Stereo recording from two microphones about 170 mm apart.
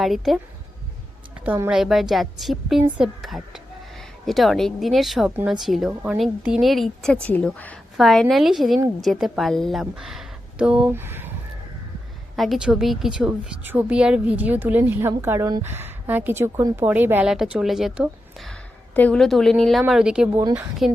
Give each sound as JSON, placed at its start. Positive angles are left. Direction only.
{"t": 0.0, "sound": "a woman's voice", "side_deg": 0}
{"t": 1.5, "sound": "a woman's voice", "side_deg": -10}
{"t": 12.4, "sound": "a woman's voice", "side_deg": 0}